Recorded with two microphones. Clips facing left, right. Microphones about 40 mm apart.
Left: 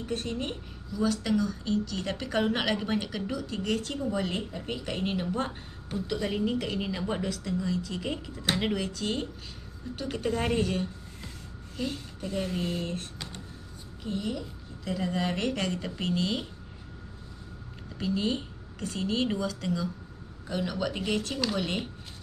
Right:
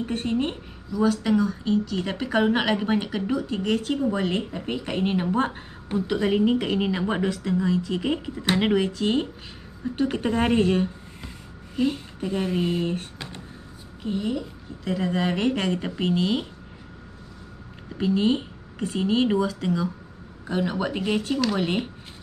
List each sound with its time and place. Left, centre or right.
0.0 s speech: right
0.9 s a woman's voice: centre
17.9 s speech: right